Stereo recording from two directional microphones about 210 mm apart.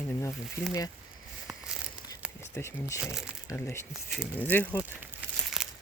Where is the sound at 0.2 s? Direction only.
15° left (ahead or behind).